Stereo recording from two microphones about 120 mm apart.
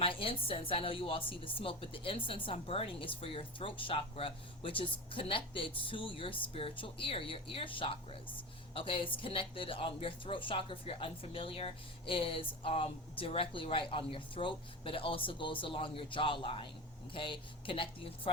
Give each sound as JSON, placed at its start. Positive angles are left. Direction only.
{"t": 0.0, "sound": "speech", "side_deg": 50}